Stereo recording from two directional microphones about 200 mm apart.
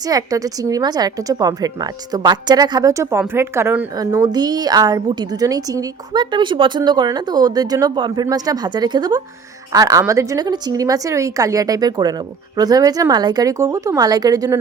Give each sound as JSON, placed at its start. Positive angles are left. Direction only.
{"t": 0.1, "sound": "a woman's voice", "side_deg": -15}